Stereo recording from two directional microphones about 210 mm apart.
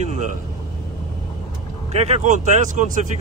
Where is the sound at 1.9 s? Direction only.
30° right (ahead or behind).